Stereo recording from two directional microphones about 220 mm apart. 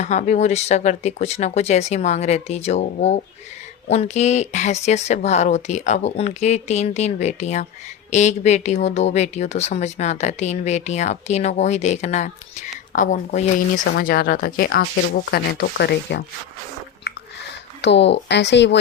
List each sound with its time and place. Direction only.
0.0 s speech: 30° left (ahead or behind)
13.8 s speech: 45° left (ahead or behind)
17.1 s chewing: 50° left (ahead or behind)
17.8 s speech: 50° left (ahead or behind)